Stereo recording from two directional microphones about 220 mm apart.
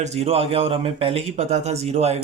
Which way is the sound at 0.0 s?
30° right (ahead or behind).